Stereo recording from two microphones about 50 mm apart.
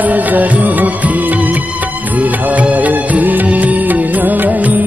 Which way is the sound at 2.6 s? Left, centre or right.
Right.